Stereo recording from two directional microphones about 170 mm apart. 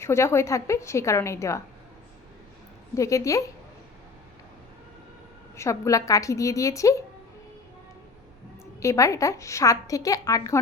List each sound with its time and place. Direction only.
0.0 s a woman's voice: 15° left (ahead or behind)
2.9 s a woman's voice: 20° left (ahead or behind)
5.5 s a woman's voice: 20° left (ahead or behind)
8.8 s a woman's voice: 15° left (ahead or behind)